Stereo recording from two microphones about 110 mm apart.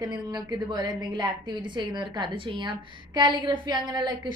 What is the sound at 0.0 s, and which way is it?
A woman's voice, 40° right (ahead or behind).